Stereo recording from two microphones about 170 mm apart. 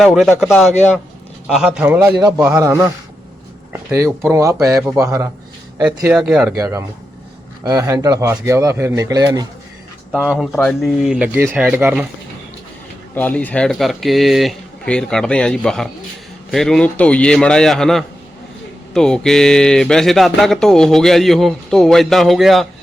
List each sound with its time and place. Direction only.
0.0 s speech: centre (ahead or behind)
3.9 s speech: 15° right (ahead or behind)
6.1 s speech: 5° right (ahead or behind)
6.6 s a man's voice: 15° right (ahead or behind)
10.1 s speech: centre (ahead or behind)
13.1 s speech: 10° left (ahead or behind)